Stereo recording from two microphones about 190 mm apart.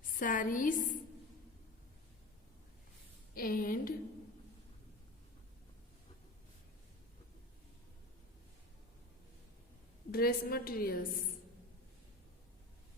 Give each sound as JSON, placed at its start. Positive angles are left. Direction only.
{"t": 0.1, "sound": "a woman's voice", "side_deg": 45}
{"t": 3.3, "sound": "a woman's voice", "side_deg": 50}
{"t": 10.1, "sound": "a woman's voice", "side_deg": 50}